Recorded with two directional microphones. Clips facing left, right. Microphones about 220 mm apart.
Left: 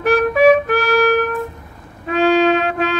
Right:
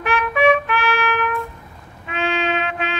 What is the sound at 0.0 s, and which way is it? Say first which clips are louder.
Music: left 6 dB; 40° left (ahead or behind).